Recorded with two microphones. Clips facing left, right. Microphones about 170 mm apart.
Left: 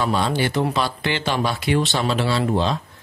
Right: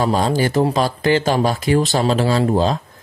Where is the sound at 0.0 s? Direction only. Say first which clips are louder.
Right 4 dB; 40° right (ahead or behind).